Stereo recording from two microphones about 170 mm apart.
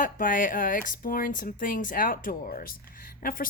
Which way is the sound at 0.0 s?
55° left (ahead or behind).